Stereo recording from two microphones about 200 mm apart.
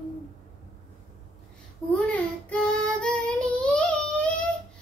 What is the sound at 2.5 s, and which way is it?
Child singing, 5° left (ahead or behind).